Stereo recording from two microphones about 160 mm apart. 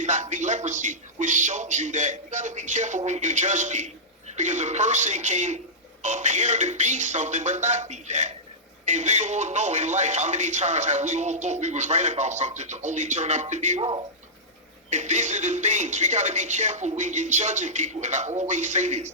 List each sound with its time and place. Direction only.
0.0 s speech: 50° right (ahead or behind)
14.8 s speech: 45° right (ahead or behind)